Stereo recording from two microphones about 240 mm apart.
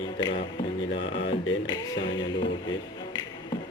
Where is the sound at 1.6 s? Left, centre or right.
Centre.